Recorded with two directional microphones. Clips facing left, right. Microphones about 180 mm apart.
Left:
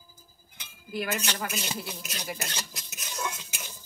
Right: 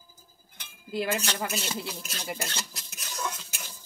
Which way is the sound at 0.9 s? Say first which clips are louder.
Right 2 dB; 30° right (ahead or behind).